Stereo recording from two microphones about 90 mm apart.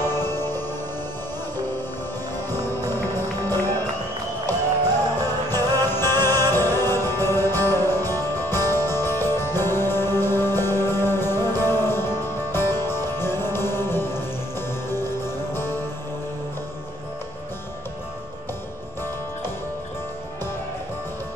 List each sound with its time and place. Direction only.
0.0 s music: 25° left (ahead or behind)
2.5 s music: 25° left (ahead or behind)
5.2 s music: 25° left (ahead or behind)